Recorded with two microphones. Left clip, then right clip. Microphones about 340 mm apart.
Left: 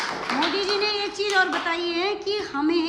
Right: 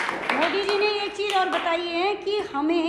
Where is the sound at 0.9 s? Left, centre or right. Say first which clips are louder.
Even; centre.